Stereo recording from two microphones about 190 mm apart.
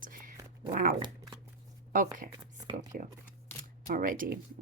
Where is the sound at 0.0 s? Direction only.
45° right (ahead or behind).